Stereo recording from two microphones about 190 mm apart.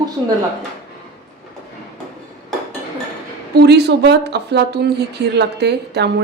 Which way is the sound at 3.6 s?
60° right (ahead or behind).